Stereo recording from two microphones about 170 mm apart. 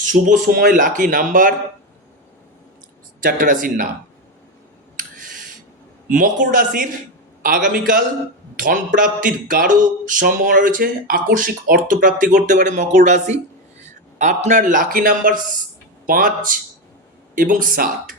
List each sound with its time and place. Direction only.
0.4 s speech: 60° right (ahead or behind)
3.2 s speech: 55° right (ahead or behind)
6.1 s speech: 50° right (ahead or behind)
8.5 s a sound: 50° right (ahead or behind)
9.0 s speech: 55° right (ahead or behind)